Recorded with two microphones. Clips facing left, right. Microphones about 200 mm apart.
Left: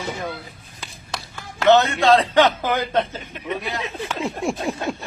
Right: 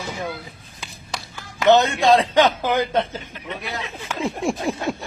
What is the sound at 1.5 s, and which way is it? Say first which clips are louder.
Speech: even; 15° right (ahead or behind).